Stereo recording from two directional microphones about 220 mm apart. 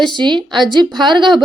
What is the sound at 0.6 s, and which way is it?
Speech, 20° right (ahead or behind).